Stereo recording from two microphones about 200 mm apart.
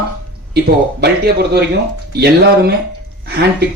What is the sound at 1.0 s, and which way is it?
Speech, 55° right (ahead or behind).